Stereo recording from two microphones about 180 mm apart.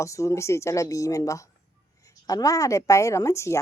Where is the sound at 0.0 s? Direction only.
15° left (ahead or behind).